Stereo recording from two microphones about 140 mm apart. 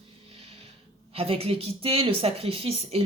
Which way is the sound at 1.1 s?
45° right (ahead or behind).